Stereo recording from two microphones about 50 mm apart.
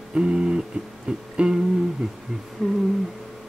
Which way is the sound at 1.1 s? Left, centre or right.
Centre.